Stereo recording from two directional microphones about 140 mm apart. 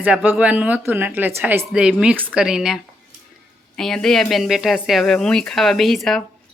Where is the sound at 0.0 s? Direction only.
10° right (ahead or behind).